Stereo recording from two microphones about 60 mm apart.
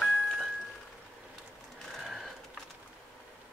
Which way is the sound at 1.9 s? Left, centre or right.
Centre.